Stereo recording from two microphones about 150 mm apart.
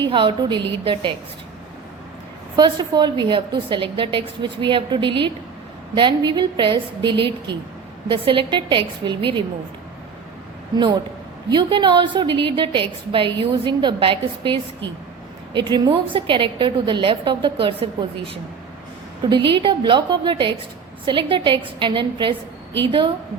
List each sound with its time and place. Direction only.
0.0 s a woman's voice: 35° right (ahead or behind)
2.6 s a woman's voice: 30° right (ahead or behind)
11.5 s a woman's voice: 30° right (ahead or behind)
19.3 s a woman's voice: 35° right (ahead or behind)